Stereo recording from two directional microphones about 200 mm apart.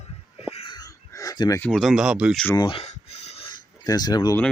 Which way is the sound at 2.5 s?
20° left (ahead or behind).